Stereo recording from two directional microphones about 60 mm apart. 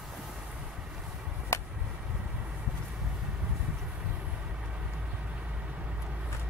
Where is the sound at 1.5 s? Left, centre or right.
Left.